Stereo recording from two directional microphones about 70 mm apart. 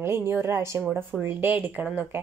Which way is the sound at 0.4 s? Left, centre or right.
Right.